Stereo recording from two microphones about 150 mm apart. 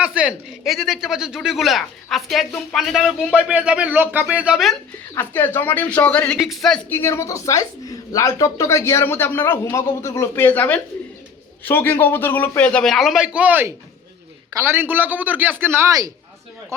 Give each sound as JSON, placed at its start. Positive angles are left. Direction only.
{"t": 0.0, "sound": "speech", "side_deg": -5}
{"t": 5.1, "sound": "a woman's voice", "side_deg": 15}
{"t": 6.9, "sound": "a woman's voice", "side_deg": 15}